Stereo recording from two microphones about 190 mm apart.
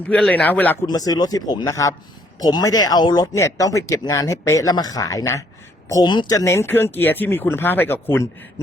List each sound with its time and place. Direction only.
0.1 s speech: 5° left (ahead or behind)
0.9 s speech: 20° left (ahead or behind)